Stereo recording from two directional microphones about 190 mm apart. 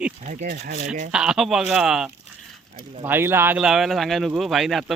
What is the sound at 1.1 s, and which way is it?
Speech, 5° right (ahead or behind).